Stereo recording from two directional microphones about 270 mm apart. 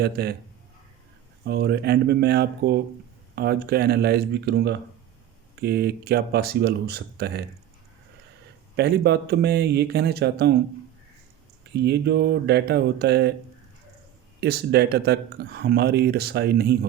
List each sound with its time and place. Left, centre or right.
0.0 s speech: right
1.5 s speech: right
8.7 s speech: right
11.7 s speech: right
14.4 s speech: right